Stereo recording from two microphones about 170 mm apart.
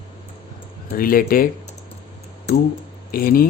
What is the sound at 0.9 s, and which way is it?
Speech, 60° left (ahead or behind).